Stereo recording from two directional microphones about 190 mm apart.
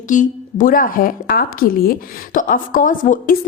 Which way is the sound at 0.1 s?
45° left (ahead or behind).